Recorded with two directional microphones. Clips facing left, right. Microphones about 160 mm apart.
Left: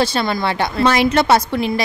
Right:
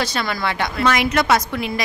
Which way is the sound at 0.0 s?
30° left (ahead or behind).